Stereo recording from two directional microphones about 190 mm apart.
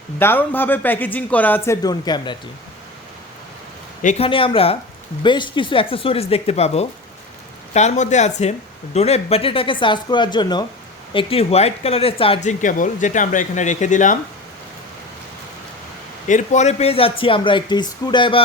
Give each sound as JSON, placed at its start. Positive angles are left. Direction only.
{"t": 0.2, "sound": "speech", "side_deg": 10}
{"t": 4.0, "sound": "speech", "side_deg": 35}
{"t": 16.3, "sound": "speech", "side_deg": 40}